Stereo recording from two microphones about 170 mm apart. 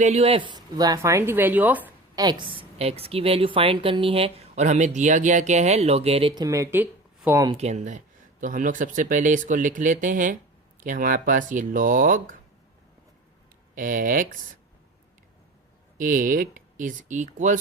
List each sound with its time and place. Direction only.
0.0 s speech: 40° right (ahead or behind); by 1.9 s 10° right (ahead or behind)
2.1 s a woman's voice: 25° right (ahead or behind)
7.5 s speech: 40° right (ahead or behind)
13.7 s speech: 50° right (ahead or behind)
16.0 s speech: 55° right (ahead or behind)